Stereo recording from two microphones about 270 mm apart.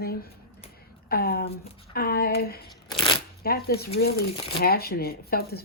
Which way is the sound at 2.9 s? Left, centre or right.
Centre.